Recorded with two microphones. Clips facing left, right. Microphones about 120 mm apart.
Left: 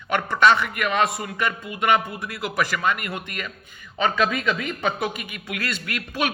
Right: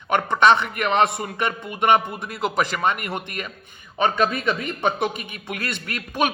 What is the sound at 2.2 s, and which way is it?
Speech, 20° right (ahead or behind).